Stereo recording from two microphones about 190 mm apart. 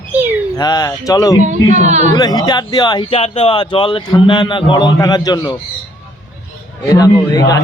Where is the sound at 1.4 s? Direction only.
40° right (ahead or behind).